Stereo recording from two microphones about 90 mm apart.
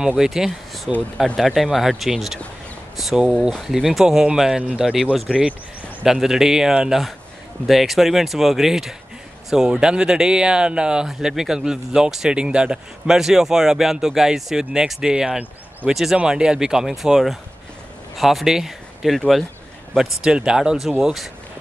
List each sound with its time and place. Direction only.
0.2 s speech: 5° right (ahead or behind)